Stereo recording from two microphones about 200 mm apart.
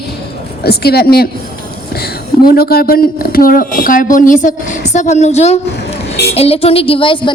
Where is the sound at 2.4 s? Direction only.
50° left (ahead or behind).